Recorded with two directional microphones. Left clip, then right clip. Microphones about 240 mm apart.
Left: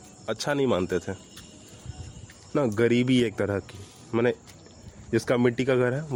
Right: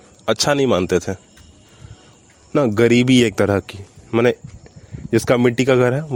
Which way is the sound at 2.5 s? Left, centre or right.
Right.